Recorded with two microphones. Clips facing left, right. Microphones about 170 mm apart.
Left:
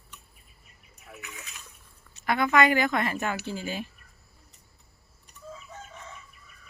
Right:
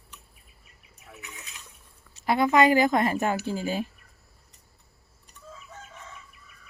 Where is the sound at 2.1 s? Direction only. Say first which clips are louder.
Right 3 dB; 30° right (ahead or behind).